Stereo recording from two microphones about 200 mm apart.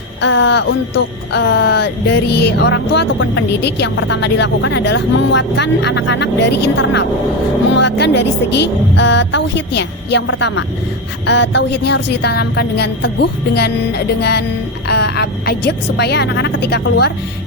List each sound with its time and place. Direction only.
0.2 s speech: 65° left (ahead or behind)